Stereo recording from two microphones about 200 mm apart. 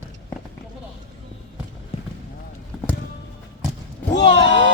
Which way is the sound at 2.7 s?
Centre (ahead or behind).